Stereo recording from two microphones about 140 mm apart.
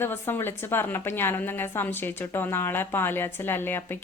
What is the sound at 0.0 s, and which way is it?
A woman's voice, 15° left (ahead or behind).